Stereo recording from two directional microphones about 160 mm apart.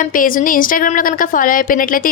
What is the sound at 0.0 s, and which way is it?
A woman's voice, 60° left (ahead or behind).